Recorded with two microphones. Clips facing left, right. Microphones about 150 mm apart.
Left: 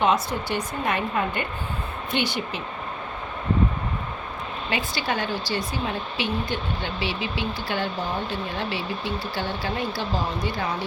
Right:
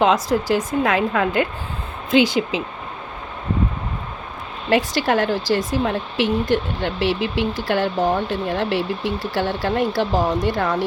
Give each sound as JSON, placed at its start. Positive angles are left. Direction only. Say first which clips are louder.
{"t": 0.0, "sound": "a woman's voice", "louder": "right 5 dB", "side_deg": -90}
{"t": 4.7, "sound": "a woman's voice", "louder": "right 10 dB", "side_deg": -90}